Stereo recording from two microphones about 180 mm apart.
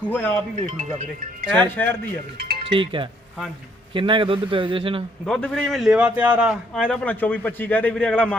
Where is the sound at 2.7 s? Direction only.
30° right (ahead or behind).